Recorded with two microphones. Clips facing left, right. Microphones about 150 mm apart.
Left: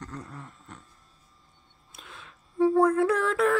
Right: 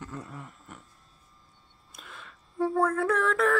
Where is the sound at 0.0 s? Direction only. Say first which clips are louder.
Even; 5° right (ahead or behind).